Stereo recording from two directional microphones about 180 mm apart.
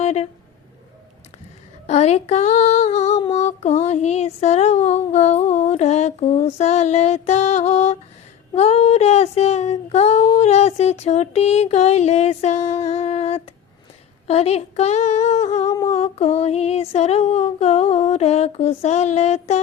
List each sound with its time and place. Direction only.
0.0 s a sound: 35° left (ahead or behind)
1.9 s child singing: 35° left (ahead or behind)
8.5 s female singing: 35° left (ahead or behind)
14.3 s child singing: 35° left (ahead or behind)
15.7 s humming: 20° left (ahead or behind)
16.0 s child singing: 35° left (ahead or behind)